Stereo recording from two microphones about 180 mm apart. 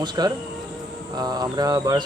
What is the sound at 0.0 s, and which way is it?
Speech, 25° right (ahead or behind).